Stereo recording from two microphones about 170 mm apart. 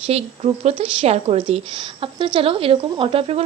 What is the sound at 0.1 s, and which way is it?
A woman's voice, 35° right (ahead or behind).